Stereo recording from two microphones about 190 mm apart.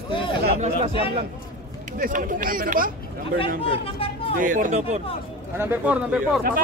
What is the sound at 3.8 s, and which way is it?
Speech, 30° left (ahead or behind).